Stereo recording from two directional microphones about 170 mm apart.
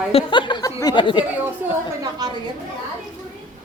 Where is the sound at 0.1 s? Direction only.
30° left (ahead or behind).